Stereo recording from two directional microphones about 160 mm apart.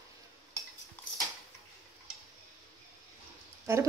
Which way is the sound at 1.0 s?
10° left (ahead or behind).